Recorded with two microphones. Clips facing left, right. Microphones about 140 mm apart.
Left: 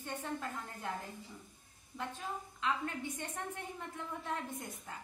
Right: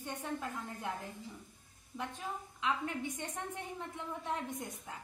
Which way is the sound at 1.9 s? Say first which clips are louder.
Even; 15° right (ahead or behind).